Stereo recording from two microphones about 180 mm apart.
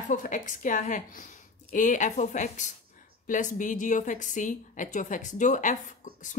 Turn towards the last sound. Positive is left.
turn(degrees=45)  # may be behind; listen again after turning